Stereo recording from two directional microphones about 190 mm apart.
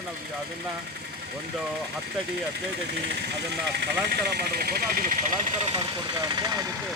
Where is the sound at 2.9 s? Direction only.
65° right (ahead or behind); by 6.7 s 20° right (ahead or behind).